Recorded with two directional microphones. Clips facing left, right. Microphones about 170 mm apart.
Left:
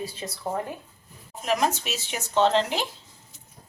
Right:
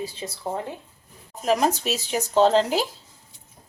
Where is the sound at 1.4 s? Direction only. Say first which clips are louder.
Right 4 dB; 35° right (ahead or behind).